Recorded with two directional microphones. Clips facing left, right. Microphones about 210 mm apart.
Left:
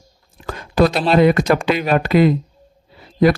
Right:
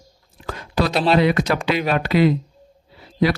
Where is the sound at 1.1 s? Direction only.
50° left (ahead or behind).